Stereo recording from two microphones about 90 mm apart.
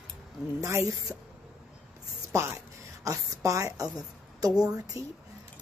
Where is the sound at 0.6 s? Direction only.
35° right (ahead or behind).